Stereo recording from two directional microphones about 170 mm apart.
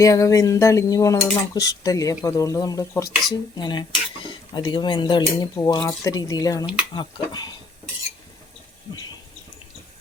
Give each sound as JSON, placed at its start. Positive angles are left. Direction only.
{"t": 0.0, "sound": "dishes", "side_deg": 20}